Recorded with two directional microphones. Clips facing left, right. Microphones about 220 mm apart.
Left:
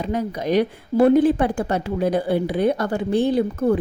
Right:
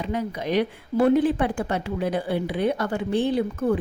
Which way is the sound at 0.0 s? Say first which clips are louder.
Left 3 dB; 40° left (ahead or behind).